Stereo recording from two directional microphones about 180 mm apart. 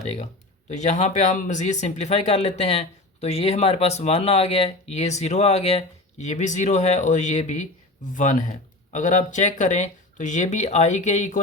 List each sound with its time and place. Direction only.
0.7 s speech: 40° left (ahead or behind)